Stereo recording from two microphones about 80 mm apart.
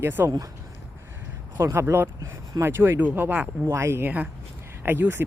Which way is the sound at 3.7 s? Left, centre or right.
Right.